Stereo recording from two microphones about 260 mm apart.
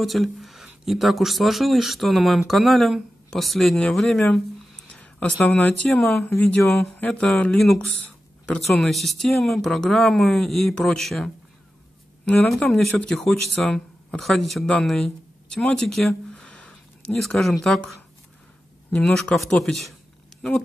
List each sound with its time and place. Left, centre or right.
0.0 s speech: centre